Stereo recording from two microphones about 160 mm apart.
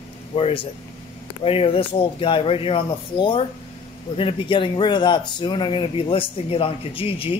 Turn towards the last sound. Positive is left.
turn(degrees=35)  # may be behind; listen again after turning